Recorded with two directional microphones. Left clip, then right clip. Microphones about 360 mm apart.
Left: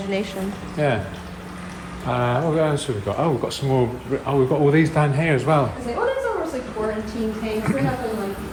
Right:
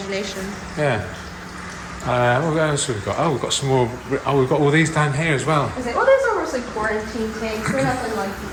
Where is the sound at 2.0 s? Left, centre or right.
Centre.